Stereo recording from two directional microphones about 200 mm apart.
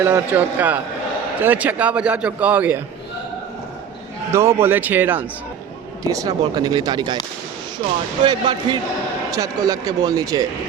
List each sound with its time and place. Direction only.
0.0 s a man's voice: 10° right (ahead or behind)
4.3 s a man's voice: 15° right (ahead or behind)
8.2 s a man's voice: 25° right (ahead or behind)